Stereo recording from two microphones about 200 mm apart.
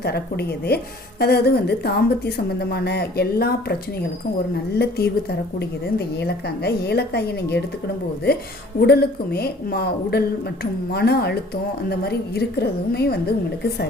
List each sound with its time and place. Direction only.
0.0 s a woman's voice: 55° left (ahead or behind)
4.8 s a woman's voice: 50° left (ahead or behind)
8.8 s a woman's voice: 55° left (ahead or behind)